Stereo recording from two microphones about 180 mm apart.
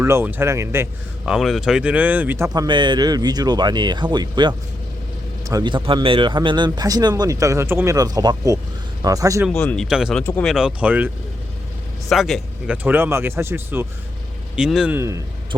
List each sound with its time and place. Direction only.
0.0 s a man's voice: 15° right (ahead or behind)
9.5 s speech: 5° left (ahead or behind)
10.5 s speech: 5° right (ahead or behind)
14.9 s speech: 15° right (ahead or behind)